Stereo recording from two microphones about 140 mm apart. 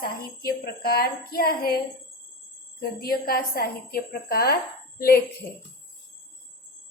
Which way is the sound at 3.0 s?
90° left.